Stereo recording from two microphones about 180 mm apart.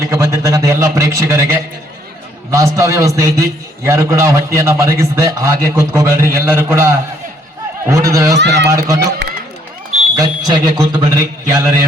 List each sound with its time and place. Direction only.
0.0 s a man's voice: 15° right (ahead or behind)
8.4 s speech: 70° right (ahead or behind)
8.7 s a man's voice: 20° right (ahead or behind)
10.2 s a man's voice: 25° right (ahead or behind)